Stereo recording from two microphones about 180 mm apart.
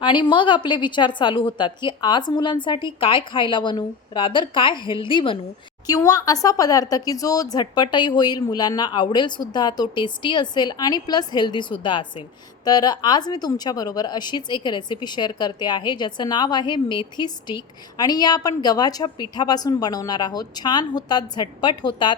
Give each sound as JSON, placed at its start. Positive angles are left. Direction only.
{"t": 0.0, "sound": "speech", "side_deg": 25}